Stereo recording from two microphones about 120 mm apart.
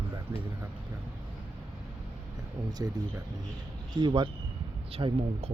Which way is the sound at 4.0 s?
40° right (ahead or behind).